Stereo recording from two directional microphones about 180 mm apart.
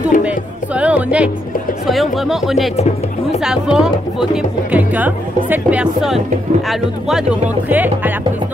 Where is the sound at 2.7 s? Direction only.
40° left (ahead or behind).